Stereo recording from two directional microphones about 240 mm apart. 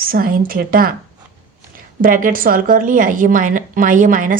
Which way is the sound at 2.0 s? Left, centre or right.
Right.